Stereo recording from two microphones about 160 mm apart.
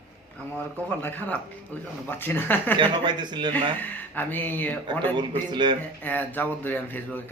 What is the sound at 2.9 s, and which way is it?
Speech, 25° right (ahead or behind).